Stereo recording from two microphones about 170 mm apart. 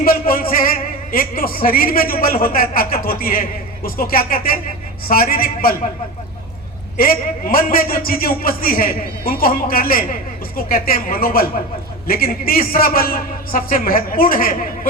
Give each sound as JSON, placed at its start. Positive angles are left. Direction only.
{"t": 0.0, "sound": "a man's voice", "side_deg": 60}
{"t": 6.9, "sound": "a man's voice", "side_deg": 60}